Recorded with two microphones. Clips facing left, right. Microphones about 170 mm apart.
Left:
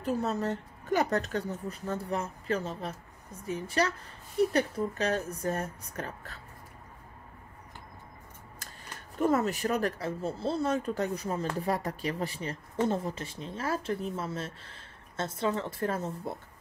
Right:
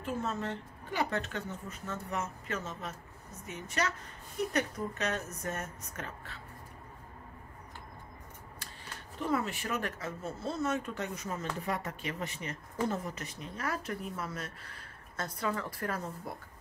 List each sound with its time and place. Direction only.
0.0 s speech: 40° left (ahead or behind)
9.2 s speech: 45° left (ahead or behind); by 16.3 s 25° left (ahead or behind)